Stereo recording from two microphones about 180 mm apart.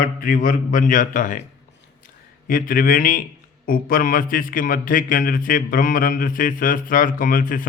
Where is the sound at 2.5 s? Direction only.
50° left (ahead or behind).